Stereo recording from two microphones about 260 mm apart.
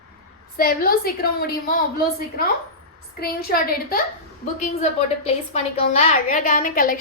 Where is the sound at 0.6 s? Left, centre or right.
Left.